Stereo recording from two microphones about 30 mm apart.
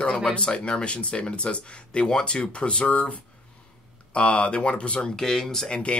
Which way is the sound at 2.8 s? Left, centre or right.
Left.